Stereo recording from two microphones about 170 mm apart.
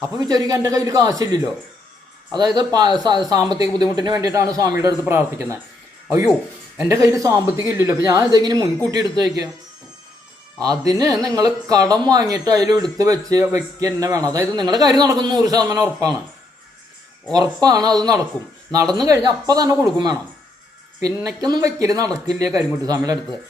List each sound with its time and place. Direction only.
0.2 s speech: 20° right (ahead or behind)
6.8 s speech: 20° right (ahead or behind)
10.6 s speech: 20° right (ahead or behind)
17.3 s speech: 20° right (ahead or behind)